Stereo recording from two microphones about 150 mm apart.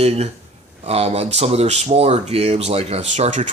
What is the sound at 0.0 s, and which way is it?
Speech, 45° right (ahead or behind).